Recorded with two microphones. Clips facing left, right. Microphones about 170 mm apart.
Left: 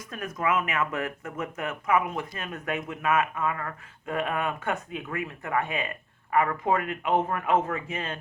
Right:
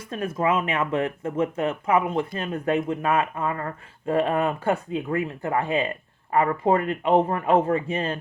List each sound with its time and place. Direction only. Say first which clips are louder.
0.1 s speech: right 4 dB; 30° right (ahead or behind)